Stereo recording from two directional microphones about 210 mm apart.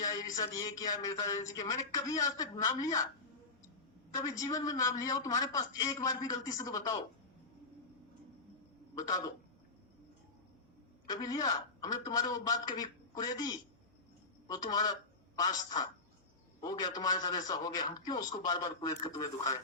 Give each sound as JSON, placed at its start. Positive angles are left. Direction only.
{"t": 0.1, "sound": "a man's voice", "side_deg": 15}
{"t": 4.1, "sound": "a man's voice", "side_deg": 15}
{"t": 9.0, "sound": "a man's voice", "side_deg": 15}
{"t": 11.1, "sound": "a man's voice", "side_deg": 20}